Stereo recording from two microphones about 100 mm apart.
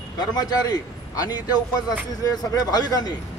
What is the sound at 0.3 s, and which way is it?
Speech, 40° left (ahead or behind).